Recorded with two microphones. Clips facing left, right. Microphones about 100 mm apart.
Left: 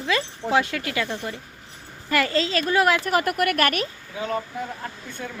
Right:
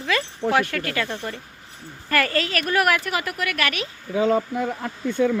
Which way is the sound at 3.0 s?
45° left (ahead or behind).